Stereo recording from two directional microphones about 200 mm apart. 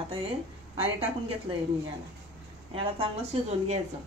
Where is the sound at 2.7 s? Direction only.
30° right (ahead or behind).